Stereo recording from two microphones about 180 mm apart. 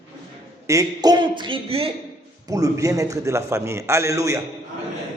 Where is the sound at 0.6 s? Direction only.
15° right (ahead or behind).